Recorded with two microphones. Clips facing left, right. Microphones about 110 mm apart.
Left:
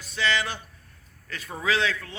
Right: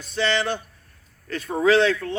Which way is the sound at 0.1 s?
30° right (ahead or behind).